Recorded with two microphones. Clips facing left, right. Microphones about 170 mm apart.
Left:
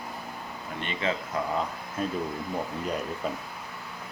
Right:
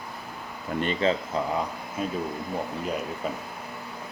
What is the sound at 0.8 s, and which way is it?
Speech, 30° right (ahead or behind).